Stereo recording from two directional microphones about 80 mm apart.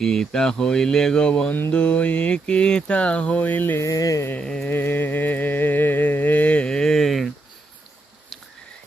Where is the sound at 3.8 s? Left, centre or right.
Left.